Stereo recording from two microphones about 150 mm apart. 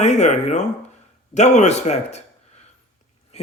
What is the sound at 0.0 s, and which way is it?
A man's voice, 50° left (ahead or behind).